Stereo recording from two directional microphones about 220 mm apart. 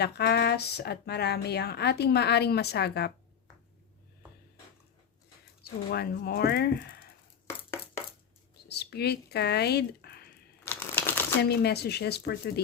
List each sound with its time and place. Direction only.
0.0 s speech: 45° left (ahead or behind)
5.9 s speech: 45° left (ahead or behind)
7.4 s a sound: 10° left (ahead or behind)
8.7 s speech: 50° left (ahead or behind)
10.6 s crumpling: 10° left (ahead or behind)
11.4 s speech: 45° left (ahead or behind)